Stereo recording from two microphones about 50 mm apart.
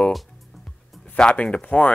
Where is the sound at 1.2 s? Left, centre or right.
Centre.